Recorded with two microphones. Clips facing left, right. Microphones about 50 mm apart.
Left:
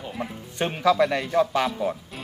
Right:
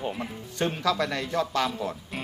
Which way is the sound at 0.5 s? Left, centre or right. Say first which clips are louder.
Left 5 dB; left.